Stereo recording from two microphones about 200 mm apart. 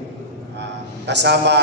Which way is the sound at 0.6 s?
60° right (ahead or behind).